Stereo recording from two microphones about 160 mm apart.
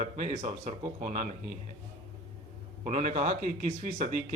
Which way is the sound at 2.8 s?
50° right (ahead or behind).